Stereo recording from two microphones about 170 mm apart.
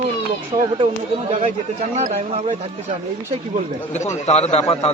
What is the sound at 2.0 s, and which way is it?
Speech, 45° right (ahead or behind).